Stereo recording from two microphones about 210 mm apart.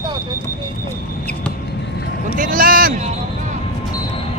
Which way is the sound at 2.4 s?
40° right (ahead or behind).